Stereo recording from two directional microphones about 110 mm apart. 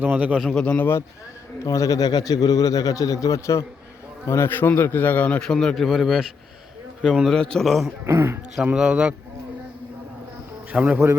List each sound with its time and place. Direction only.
0.0 s a man's voice: 15° right (ahead or behind)
0.4 s a man's voice: 10° left (ahead or behind)
1.6 s a man's voice: 30° left (ahead or behind); by 7.9 s centre (ahead or behind)
8.0 s speech: 25° right (ahead or behind)
8.6 s a man's voice: 10° right (ahead or behind)
10.7 s a man's voice: 10° right (ahead or behind)